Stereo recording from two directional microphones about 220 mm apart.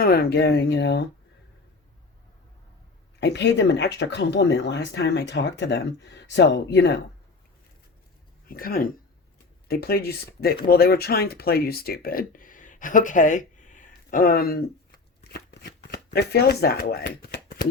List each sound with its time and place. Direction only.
0.0 s speech: 45° left (ahead or behind)
3.2 s speech: 50° left (ahead or behind)
8.4 s speech: 40° left (ahead or behind)
15.2 s shuffling cards: 45° left (ahead or behind)
16.2 s speech: 45° left (ahead or behind)